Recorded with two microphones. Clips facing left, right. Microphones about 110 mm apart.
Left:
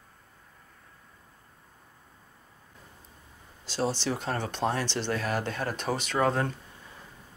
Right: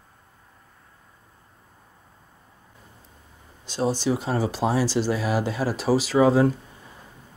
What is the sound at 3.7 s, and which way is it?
Speech, 15° right (ahead or behind).